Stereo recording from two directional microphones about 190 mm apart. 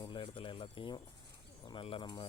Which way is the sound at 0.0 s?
25° left (ahead or behind).